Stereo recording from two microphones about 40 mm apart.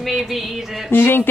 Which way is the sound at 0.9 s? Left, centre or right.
Left.